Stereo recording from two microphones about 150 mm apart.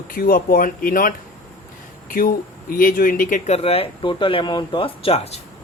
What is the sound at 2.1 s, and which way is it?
Speech, 70° left (ahead or behind).